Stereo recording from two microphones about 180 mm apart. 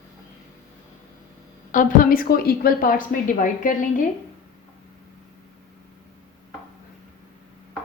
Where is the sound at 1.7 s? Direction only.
50° left (ahead or behind).